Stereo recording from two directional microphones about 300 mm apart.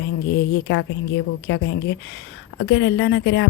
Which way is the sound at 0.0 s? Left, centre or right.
Left.